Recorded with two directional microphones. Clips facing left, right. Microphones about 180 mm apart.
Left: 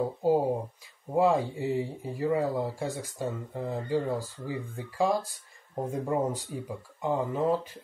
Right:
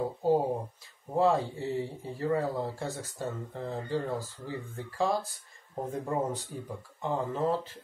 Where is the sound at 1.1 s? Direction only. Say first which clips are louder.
Left 2 dB; 15° left (ahead or behind).